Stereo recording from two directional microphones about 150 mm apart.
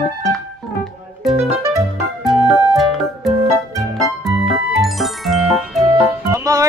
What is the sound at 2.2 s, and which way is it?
Music, centre (ahead or behind).